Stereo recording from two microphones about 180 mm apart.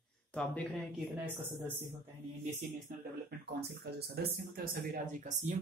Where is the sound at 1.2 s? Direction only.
10° right (ahead or behind).